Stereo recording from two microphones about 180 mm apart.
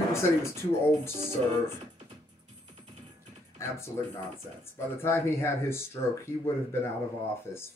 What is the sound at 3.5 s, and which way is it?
Speech, 15° left (ahead or behind).